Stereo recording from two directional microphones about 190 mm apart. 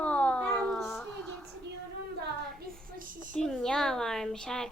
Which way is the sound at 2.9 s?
45° right (ahead or behind).